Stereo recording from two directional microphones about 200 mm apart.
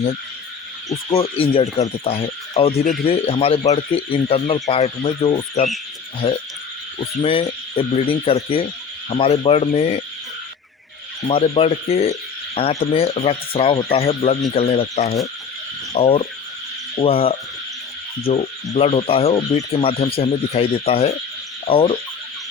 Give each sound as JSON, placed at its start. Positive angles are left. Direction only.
{"t": 1.1, "sound": "speech", "side_deg": 25}
{"t": 7.2, "sound": "speech", "side_deg": 25}
{"t": 11.3, "sound": "speech", "side_deg": 30}